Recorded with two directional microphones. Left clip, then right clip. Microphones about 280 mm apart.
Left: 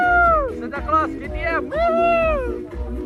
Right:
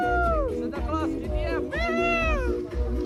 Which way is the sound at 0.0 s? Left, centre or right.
Centre.